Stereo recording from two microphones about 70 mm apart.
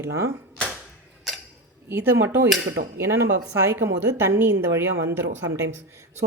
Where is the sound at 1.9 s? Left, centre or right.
Right.